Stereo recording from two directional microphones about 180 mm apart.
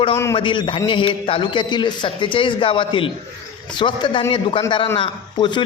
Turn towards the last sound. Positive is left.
turn(degrees=25)  # may be behind; listen again after turning